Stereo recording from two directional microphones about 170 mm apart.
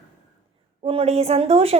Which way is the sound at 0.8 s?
35° right (ahead or behind).